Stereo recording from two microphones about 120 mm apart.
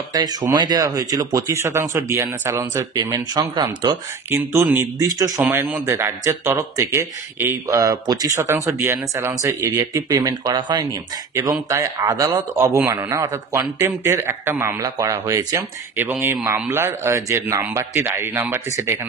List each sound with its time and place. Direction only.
0.1 s a man's voice: 30° right (ahead or behind); by 2.7 s 15° right (ahead or behind)
2.9 s speech: 35° right (ahead or behind)
5.4 s a man's voice: 15° right (ahead or behind)
16.0 s a man's voice: 15° right (ahead or behind)